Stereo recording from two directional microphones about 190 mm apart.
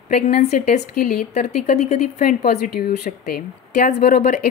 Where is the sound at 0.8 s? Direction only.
40° left (ahead or behind).